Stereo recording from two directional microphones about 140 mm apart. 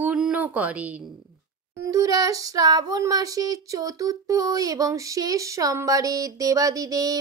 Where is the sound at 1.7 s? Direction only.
20° right (ahead or behind).